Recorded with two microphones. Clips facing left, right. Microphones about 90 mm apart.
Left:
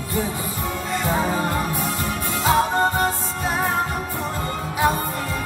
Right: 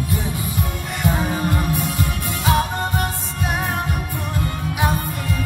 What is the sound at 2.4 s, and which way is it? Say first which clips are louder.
Music: left 2 dB; 30° left (ahead or behind).